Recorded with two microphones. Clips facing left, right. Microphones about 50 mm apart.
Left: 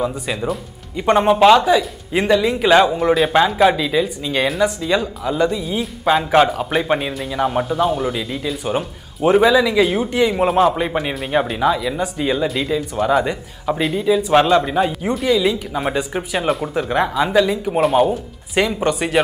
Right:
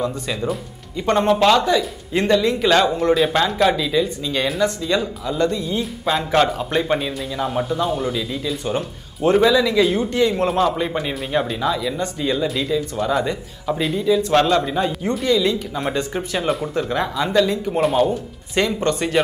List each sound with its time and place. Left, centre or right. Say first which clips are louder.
0.0 s speech: left 2 dB; centre